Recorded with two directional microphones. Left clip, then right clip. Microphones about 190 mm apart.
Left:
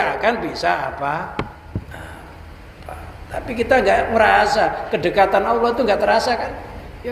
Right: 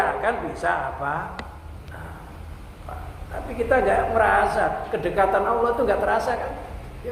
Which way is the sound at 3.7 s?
50° left (ahead or behind).